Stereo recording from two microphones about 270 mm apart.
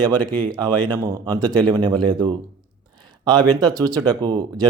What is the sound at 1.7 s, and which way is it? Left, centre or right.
A man's voice, centre.